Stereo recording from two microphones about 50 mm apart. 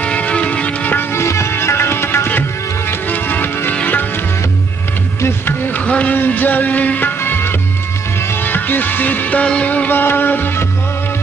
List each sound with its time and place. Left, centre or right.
0.0 s music: left
1.1 s music: left
1.5 s music: left
3.1 s music: left
5.7 s music: left
6.1 s music: left
9.8 s music: left